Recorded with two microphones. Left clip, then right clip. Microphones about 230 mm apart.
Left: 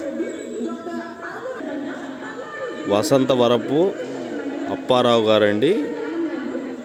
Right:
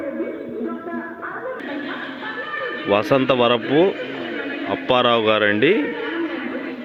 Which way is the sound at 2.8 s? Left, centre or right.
Centre.